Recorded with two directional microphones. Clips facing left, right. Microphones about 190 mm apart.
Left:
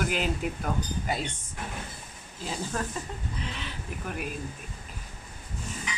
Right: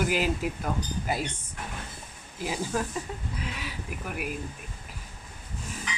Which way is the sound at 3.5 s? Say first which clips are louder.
Right 1 dB; 10° right (ahead or behind).